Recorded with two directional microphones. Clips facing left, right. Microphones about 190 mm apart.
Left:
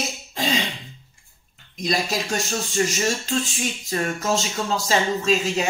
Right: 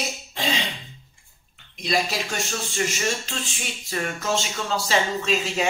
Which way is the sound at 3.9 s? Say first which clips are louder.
Left 2 dB; 40° left (ahead or behind).